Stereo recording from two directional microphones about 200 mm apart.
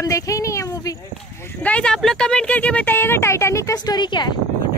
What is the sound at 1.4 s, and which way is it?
Speech, 5° left (ahead or behind).